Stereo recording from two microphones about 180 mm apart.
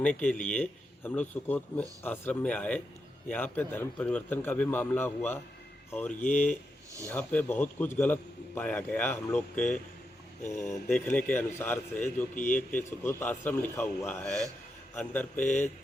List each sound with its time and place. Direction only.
0.0 s a man's voice: 5° left (ahead or behind)
12.3 s a man's voice: 45° left (ahead or behind)
12.5 s a man's voice: 10° left (ahead or behind)